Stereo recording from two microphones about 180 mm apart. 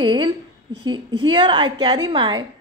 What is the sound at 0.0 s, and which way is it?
A woman's voice, 25° right (ahead or behind).